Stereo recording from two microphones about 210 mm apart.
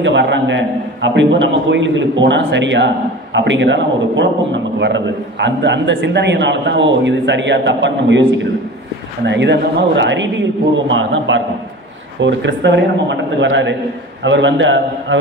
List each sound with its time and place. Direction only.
0.0 s a man's voice: 60° right (ahead or behind)